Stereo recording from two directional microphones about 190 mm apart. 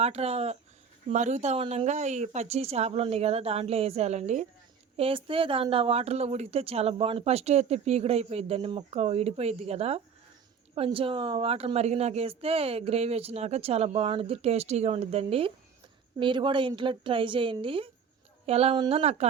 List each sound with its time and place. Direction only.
0.0 s a woman's voice: 35° right (ahead or behind)